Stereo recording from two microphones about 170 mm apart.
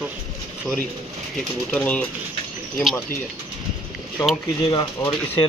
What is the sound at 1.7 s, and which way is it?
Speech, 5° left (ahead or behind).